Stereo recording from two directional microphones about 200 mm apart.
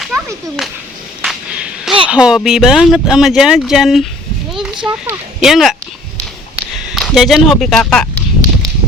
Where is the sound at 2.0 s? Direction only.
5° right (ahead or behind).